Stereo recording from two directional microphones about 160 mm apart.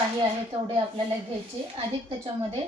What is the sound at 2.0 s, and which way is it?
Speech, 35° right (ahead or behind).